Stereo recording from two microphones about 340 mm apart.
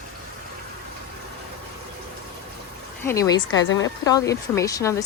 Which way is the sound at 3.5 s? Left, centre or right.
Left.